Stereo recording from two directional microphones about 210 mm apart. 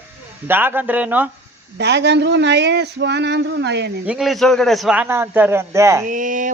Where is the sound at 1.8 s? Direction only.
55° right (ahead or behind).